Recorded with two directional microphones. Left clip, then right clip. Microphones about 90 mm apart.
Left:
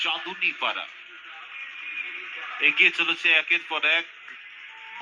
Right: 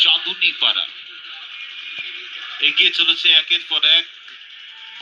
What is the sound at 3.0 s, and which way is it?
Speech, 30° right (ahead or behind).